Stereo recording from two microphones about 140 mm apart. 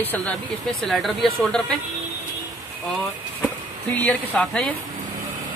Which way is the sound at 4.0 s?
10° left (ahead or behind).